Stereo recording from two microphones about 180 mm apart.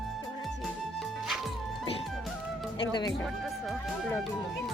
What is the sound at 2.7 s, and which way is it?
Speech, 25° left (ahead or behind).